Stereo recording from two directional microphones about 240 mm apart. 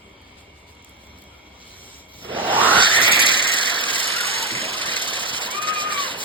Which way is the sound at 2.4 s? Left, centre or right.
Centre.